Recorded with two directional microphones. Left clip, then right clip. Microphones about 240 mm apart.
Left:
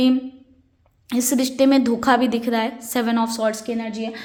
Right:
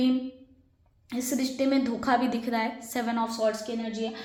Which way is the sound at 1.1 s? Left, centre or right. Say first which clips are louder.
Left 9 dB; left.